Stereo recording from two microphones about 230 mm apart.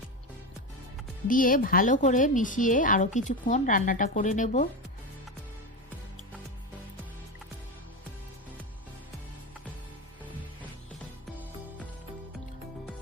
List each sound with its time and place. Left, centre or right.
1.3 s speech: left